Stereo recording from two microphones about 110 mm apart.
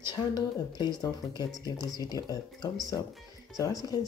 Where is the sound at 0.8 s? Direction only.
40° left (ahead or behind).